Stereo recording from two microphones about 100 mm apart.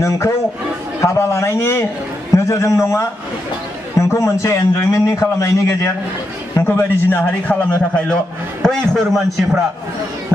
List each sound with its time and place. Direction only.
1.0 s a man's voice: 30° left (ahead or behind); by 9.6 s centre (ahead or behind)